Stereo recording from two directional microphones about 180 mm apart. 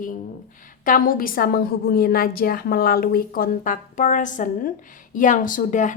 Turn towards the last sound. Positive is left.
turn(degrees=45)  # may be behind; listen again after turning